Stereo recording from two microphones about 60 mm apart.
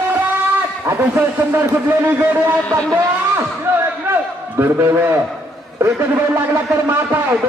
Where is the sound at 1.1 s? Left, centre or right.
Right.